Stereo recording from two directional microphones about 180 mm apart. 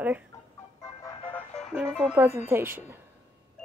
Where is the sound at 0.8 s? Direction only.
20° left (ahead or behind).